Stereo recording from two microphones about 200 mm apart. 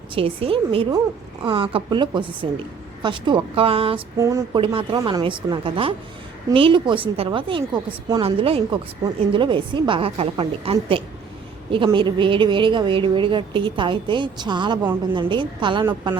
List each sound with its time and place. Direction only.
0.1 s a woman's voice: 25° right (ahead or behind)
4.2 s a woman's voice: 15° right (ahead or behind)